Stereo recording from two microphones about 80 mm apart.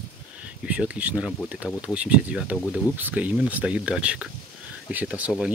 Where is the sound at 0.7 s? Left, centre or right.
Centre.